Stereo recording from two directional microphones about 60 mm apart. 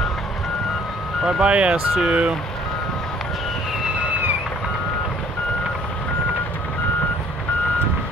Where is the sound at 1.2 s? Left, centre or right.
Centre.